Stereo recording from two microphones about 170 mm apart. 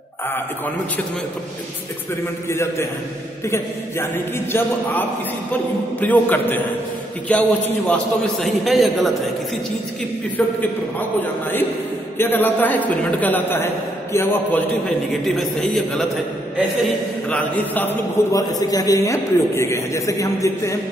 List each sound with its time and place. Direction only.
2.5 s a man's voice: 15° left (ahead or behind); by 9.3 s centre (ahead or behind)
10.3 s a man's voice: 10° left (ahead or behind)
15.2 s a man's voice: centre (ahead or behind)
17.3 s a man's voice: 10° left (ahead or behind)
18.3 s a man's voice: 20° left (ahead or behind)